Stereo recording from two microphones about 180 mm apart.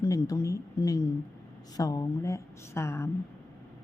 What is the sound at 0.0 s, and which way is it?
A woman's voice, 20° left (ahead or behind).